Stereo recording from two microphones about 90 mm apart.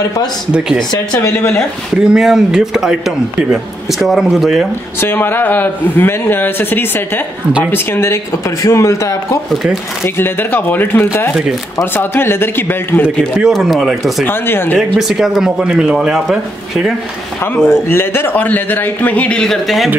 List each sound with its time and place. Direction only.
1.3 s a man's voice: 20° left (ahead or behind)
2.0 s speech: 5° right (ahead or behind)
5.0 s a man's voice: 25° left (ahead or behind)
9.5 s speech: 5° right (ahead or behind)
10.0 s a man's voice: 25° left (ahead or behind)
13.5 s speech: centre (ahead or behind)
14.2 s a man's voice: 25° left (ahead or behind)
14.8 s speech: 5° right (ahead or behind)
17.6 s a man's voice: 25° left (ahead or behind); by 19.9 s centre (ahead or behind)